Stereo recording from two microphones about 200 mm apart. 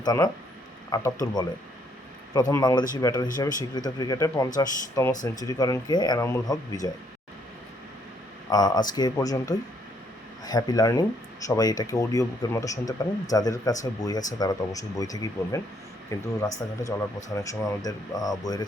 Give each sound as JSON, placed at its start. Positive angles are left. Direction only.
{"t": 0.0, "sound": "speech", "side_deg": 20}
{"t": 8.4, "sound": "speech", "side_deg": 20}